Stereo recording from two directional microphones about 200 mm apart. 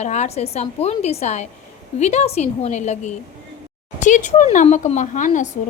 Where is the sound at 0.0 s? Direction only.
35° left (ahead or behind).